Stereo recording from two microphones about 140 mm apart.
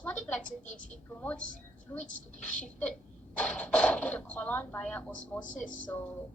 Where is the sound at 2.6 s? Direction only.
10° left (ahead or behind).